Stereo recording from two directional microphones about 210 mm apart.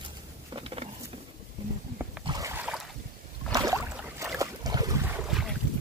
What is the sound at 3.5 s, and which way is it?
Rowboat, 15° right (ahead or behind).